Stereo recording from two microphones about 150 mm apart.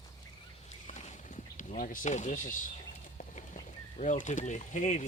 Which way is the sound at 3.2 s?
55° left (ahead or behind).